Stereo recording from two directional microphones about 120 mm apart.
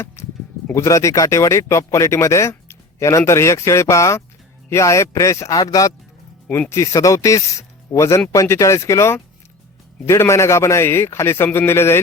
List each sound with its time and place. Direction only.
0.7 s speech: 25° left (ahead or behind)